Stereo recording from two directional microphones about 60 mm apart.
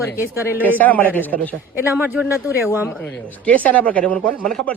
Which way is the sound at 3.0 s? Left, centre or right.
Left.